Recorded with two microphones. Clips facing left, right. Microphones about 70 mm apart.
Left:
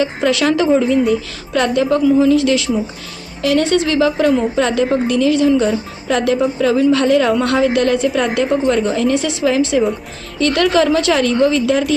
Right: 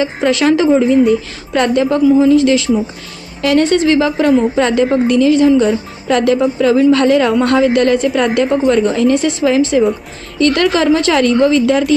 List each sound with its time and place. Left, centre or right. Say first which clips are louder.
0.0 s speech: right 2 dB; right
6.1 s a woman's voice: right 3 dB; right
7.3 s speech: right 3 dB; right